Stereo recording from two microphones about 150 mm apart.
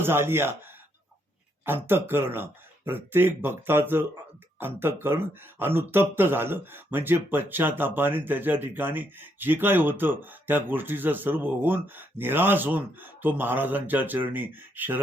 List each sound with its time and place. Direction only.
0.0 s speech: 15° right (ahead or behind)
1.6 s speech: 15° right (ahead or behind)